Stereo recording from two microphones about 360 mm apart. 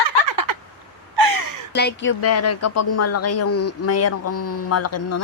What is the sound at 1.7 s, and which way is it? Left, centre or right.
Speech, left.